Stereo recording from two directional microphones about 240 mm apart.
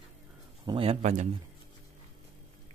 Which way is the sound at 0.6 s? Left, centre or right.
Right.